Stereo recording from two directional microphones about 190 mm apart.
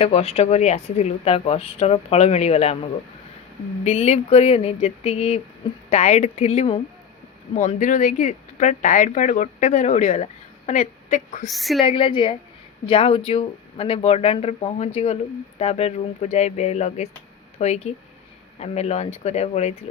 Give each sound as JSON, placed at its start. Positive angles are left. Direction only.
{"t": 0.0, "sound": "speech", "side_deg": 30}
{"t": 3.8, "sound": "speech", "side_deg": 30}
{"t": 7.5, "sound": "a woman's voice", "side_deg": 45}
{"t": 11.4, "sound": "speech", "side_deg": 0}
{"t": 11.8, "sound": "a woman's voice", "side_deg": 25}